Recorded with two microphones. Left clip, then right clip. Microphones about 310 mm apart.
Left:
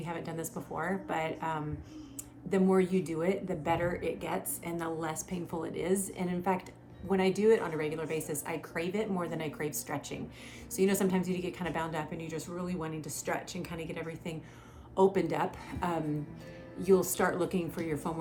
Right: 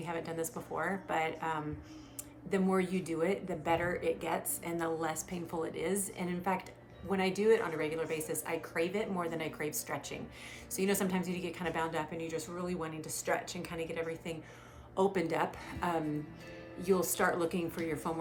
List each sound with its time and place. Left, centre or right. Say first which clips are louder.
0.0 s a woman's voice: right 1 dB; centre